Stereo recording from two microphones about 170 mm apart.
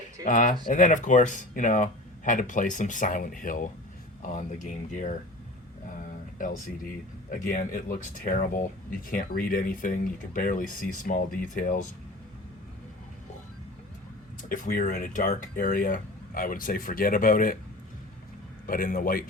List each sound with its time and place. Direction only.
0.3 s speech: 50° left (ahead or behind)
7.3 s speech: 55° left (ahead or behind)
14.5 s speech: 55° left (ahead or behind)
18.6 s speech: 55° left (ahead or behind)